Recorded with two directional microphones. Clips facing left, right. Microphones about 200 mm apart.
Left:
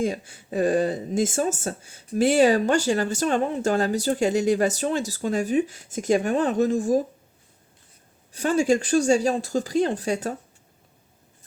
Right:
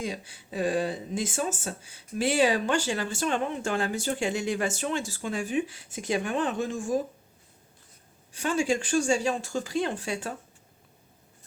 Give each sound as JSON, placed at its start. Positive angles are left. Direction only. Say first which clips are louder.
{"t": 0.0, "sound": "speech", "louder": "left 8 dB", "side_deg": 50}
{"t": 8.3, "sound": "speech", "louder": "left 6 dB", "side_deg": 40}